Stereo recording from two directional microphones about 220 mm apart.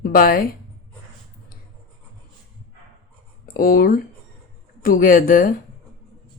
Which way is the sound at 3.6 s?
40° left (ahead or behind).